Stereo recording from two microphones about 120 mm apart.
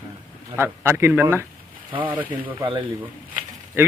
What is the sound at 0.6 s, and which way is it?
A man's voice, 20° right (ahead or behind).